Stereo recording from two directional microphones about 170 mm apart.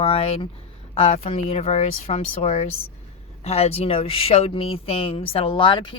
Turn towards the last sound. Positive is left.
turn(degrees=30)  # may be behind; listen again after turning